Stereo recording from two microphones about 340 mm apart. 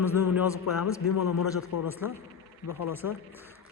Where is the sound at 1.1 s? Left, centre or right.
Left.